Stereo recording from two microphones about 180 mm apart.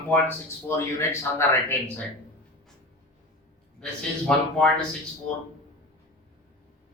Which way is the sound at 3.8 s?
5° left (ahead or behind).